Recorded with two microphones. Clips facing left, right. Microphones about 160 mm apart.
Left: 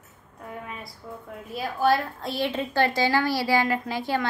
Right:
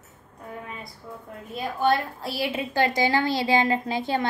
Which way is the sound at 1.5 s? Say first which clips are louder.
Even; centre (ahead or behind).